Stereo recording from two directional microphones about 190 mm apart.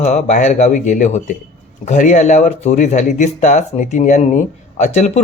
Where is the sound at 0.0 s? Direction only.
35° left (ahead or behind).